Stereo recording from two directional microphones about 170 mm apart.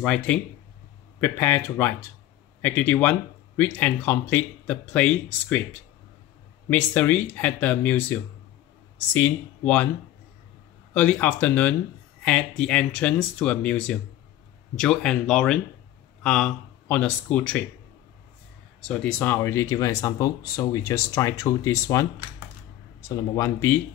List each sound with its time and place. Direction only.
0.0 s speech: 5° left (ahead or behind)
6.7 s speech: 10° left (ahead or behind)
10.9 s speech: 10° left (ahead or behind)
18.8 s speech: 5° left (ahead or behind)
23.0 s speech: 20° left (ahead or behind)